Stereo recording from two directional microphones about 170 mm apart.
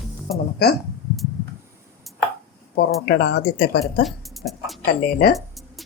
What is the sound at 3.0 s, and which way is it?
Speech, 70° left (ahead or behind).